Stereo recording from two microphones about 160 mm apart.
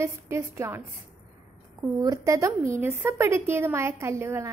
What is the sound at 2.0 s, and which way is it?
A woman's voice, 20° right (ahead or behind).